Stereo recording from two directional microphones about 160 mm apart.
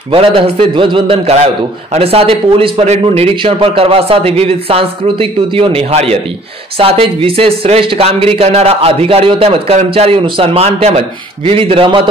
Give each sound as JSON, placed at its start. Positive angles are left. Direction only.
{"t": 0.1, "sound": "speech", "side_deg": -35}